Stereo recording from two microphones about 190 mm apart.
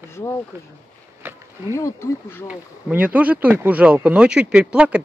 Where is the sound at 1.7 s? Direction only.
15° left (ahead or behind).